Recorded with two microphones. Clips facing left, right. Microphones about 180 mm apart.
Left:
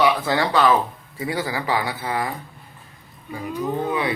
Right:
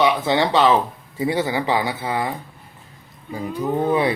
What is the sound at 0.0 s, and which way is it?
Speech, 20° right (ahead or behind).